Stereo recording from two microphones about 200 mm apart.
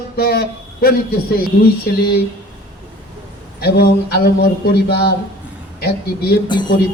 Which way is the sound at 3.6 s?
50° left (ahead or behind).